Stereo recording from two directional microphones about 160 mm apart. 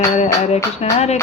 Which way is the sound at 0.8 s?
40° left (ahead or behind).